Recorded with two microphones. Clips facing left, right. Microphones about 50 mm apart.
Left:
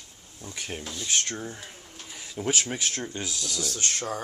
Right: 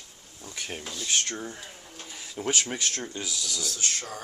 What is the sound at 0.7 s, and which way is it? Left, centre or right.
Speech, centre.